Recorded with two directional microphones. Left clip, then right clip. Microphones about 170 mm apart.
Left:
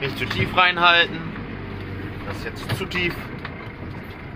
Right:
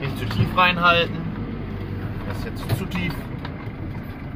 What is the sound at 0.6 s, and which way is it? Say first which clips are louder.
Speech: left 1 dB; 15° left (ahead or behind).